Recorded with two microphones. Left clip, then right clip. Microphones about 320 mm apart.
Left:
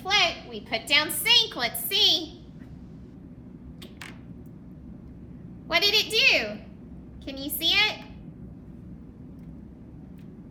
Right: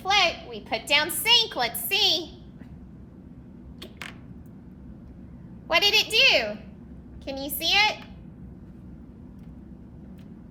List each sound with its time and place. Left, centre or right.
0.0 s a woman's voice: right
5.6 s a woman's voice: centre